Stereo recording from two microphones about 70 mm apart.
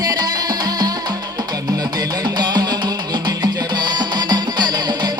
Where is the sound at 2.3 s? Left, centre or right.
Right.